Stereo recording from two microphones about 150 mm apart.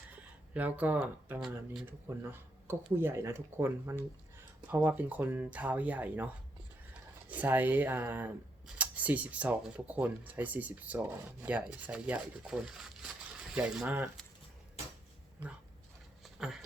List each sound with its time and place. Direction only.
0.5 s speech: 10° right (ahead or behind)
7.3 s speech: 10° right (ahead or behind)
16.2 s a sound: centre (ahead or behind)